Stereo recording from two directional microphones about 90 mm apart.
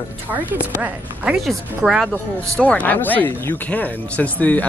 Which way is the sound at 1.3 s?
5° right (ahead or behind).